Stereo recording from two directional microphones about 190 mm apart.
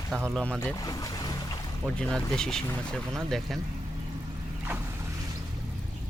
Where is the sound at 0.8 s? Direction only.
20° left (ahead or behind).